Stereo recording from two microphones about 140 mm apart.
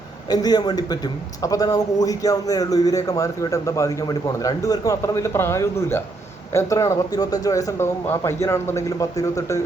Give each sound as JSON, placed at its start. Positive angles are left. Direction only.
{"t": 0.3, "sound": "a man's voice", "side_deg": 30}